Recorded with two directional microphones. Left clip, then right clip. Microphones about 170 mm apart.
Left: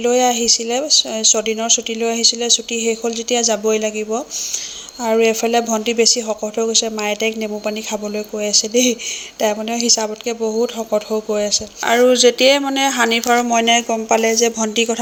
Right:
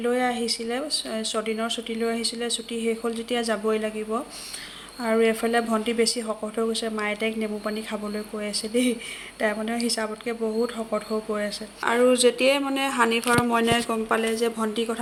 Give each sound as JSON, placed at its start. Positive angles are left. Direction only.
{"t": 0.0, "sound": "speech", "side_deg": 25}